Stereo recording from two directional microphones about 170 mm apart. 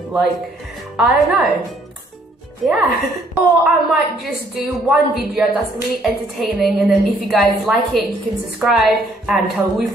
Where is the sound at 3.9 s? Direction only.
Centre (ahead or behind).